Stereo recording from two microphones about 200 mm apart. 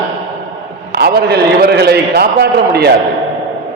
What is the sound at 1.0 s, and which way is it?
A man's voice, 50° right (ahead or behind).